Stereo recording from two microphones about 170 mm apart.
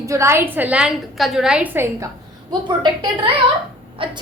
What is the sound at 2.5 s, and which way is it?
A woman's voice, 30° right (ahead or behind).